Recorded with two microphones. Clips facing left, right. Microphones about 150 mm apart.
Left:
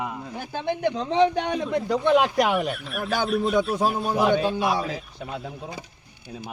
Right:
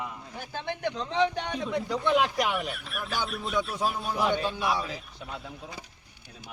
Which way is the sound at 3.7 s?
55° left (ahead or behind).